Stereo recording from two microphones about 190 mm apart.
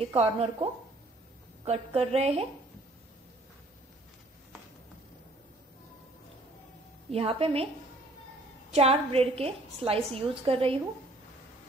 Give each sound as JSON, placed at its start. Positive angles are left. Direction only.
{"t": 0.0, "sound": "a woman's voice", "side_deg": -30}
{"t": 7.1, "sound": "a woman's voice", "side_deg": -30}
{"t": 8.7, "sound": "a woman's voice", "side_deg": -35}